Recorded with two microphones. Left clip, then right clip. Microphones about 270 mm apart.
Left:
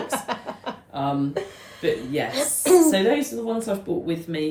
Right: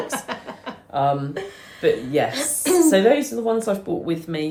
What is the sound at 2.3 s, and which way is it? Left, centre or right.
Speech, centre.